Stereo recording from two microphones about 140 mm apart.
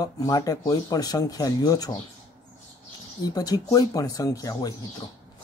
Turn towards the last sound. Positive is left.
turn(degrees=25)  # may be behind; listen again after turning